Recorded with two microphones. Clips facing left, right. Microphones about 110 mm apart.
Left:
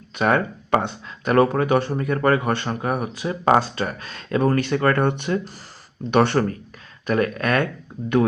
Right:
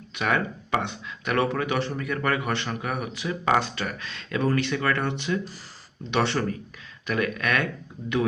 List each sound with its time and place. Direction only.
0.2 s speech: 40° left (ahead or behind)
7.1 s speech: 40° left (ahead or behind)